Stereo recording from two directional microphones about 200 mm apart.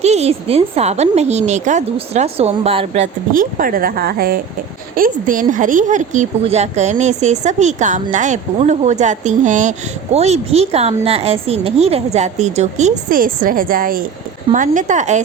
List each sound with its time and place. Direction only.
0.0 s speech: 35° right (ahead or behind)